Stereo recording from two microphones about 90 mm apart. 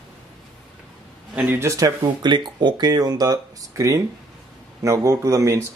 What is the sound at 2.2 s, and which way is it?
A man's voice, 55° right (ahead or behind).